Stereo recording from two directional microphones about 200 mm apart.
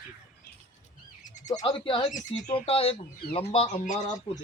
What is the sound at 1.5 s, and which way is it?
Speech, 25° left (ahead or behind).